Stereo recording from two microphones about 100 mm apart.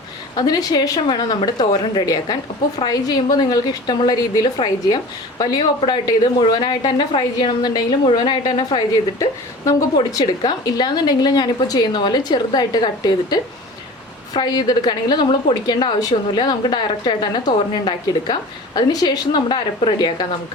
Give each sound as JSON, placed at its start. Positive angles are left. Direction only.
{"t": 0.3, "sound": "a woman's voice", "side_deg": 40}
{"t": 9.1, "sound": "a woman's voice", "side_deg": 35}